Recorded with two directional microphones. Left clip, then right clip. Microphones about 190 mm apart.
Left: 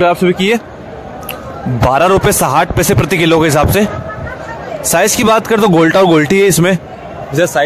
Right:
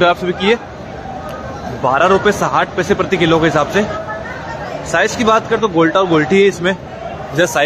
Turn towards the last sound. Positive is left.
turn(degrees=35)  # may be behind; listen again after turning